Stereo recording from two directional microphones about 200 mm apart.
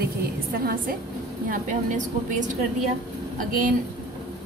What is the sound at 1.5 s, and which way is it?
Speech, 40° right (ahead or behind).